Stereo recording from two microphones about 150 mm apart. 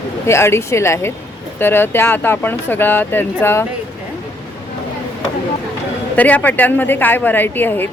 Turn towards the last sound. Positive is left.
turn(degrees=15)  # may be behind; listen again after turning